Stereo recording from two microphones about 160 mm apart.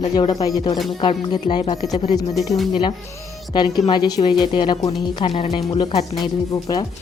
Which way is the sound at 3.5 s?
25° left (ahead or behind).